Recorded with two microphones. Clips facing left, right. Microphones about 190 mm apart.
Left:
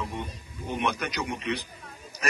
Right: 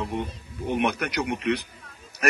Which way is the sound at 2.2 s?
65° right (ahead or behind).